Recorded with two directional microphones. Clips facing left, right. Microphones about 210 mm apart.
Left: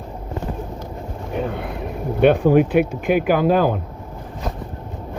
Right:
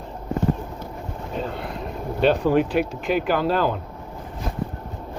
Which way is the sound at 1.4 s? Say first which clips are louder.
Left 4 dB; 55° left (ahead or behind).